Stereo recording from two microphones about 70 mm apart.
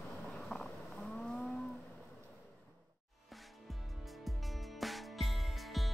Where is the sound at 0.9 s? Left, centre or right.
Centre.